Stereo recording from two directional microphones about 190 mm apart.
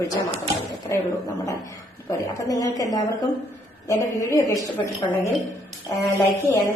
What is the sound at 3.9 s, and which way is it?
Speech, 15° left (ahead or behind).